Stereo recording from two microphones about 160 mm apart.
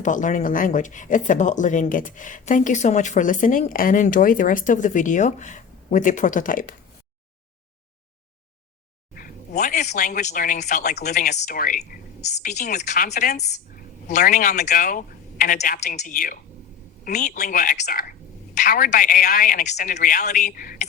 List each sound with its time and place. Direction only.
0.0 s speech: 50° left (ahead or behind)
9.1 s speech: 60° left (ahead or behind)
12.2 s speech: 45° left (ahead or behind)
13.7 s speech: 60° left (ahead or behind)